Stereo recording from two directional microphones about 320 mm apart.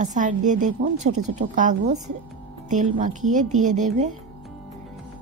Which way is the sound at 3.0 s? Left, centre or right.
Right.